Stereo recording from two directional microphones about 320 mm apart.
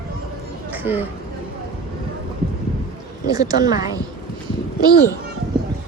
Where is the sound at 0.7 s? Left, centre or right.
Centre.